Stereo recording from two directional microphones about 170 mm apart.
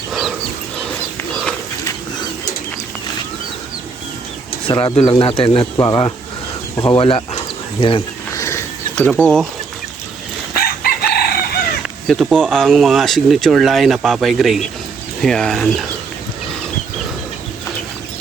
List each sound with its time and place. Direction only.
0.1 s dog: centre (ahead or behind)
4.7 s speech: 25° left (ahead or behind)
5.7 s speech: 20° left (ahead or behind)
8.4 s a sound: 15° left (ahead or behind)
10.5 s chicken: 60° left (ahead or behind)
12.0 s speech: centre (ahead or behind)